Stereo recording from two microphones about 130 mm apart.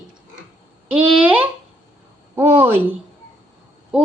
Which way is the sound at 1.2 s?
15° right (ahead or behind).